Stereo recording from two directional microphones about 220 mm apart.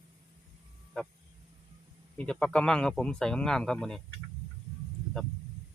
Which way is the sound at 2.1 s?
5° left (ahead or behind).